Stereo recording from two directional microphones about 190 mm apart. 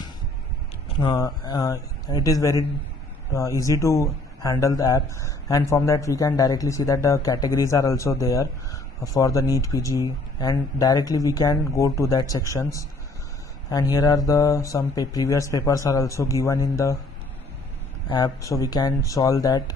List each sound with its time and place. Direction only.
0.9 s speech: 20° left (ahead or behind)
18.1 s speech: 20° left (ahead or behind)